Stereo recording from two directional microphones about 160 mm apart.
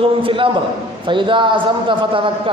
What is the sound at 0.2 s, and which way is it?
A man's voice, 35° right (ahead or behind).